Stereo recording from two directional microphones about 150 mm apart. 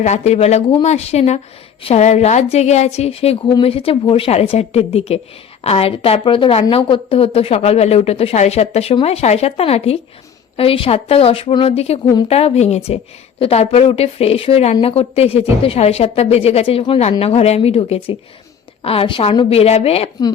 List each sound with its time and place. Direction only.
0.0 s a woman's voice: 50° left (ahead or behind)